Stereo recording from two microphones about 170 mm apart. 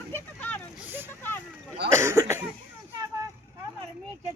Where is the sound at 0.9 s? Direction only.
10° right (ahead or behind).